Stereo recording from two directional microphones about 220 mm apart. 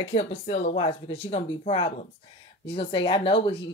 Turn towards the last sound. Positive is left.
turn(degrees=25)  # may be behind; listen again after turning